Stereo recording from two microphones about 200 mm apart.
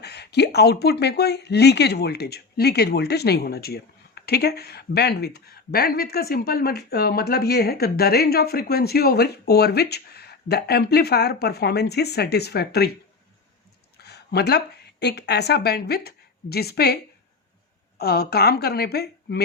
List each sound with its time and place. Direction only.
0.0 s speech: 55° left (ahead or behind)
14.0 s speech: 55° left (ahead or behind)